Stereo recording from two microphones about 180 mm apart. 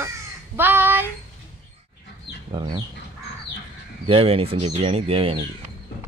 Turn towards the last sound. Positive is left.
turn(degrees=-30)  # may be behind; listen again after turning